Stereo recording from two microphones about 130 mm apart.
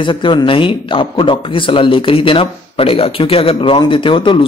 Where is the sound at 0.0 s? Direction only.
40° left (ahead or behind).